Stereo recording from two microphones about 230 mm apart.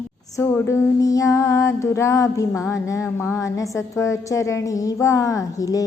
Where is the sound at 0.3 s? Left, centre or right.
Centre.